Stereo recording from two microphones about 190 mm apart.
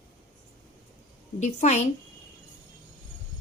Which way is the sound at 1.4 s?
35° left (ahead or behind).